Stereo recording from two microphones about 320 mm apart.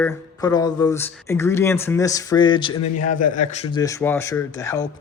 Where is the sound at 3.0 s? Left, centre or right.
Left.